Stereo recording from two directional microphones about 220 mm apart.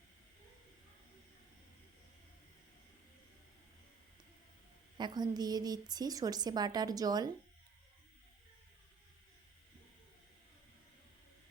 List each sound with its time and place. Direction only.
4.9 s a woman's voice: 20° right (ahead or behind)